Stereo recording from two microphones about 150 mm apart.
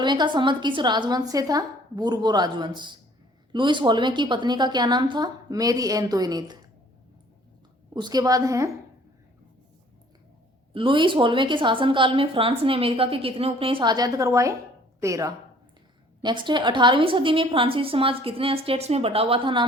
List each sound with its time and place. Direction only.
0.0 s a woman's voice: 30° right (ahead or behind)
7.9 s a woman's voice: 30° right (ahead or behind)
10.8 s a woman's voice: 35° right (ahead or behind)